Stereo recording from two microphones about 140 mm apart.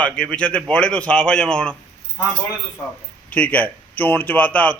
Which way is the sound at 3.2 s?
10° left (ahead or behind).